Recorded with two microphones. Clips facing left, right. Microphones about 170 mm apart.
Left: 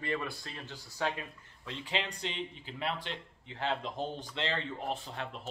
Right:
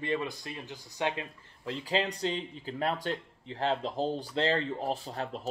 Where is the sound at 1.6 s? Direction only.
35° right (ahead or behind).